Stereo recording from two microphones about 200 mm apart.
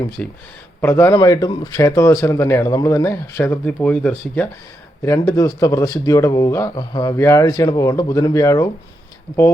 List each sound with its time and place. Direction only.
0.2 s speech: 5° left (ahead or behind)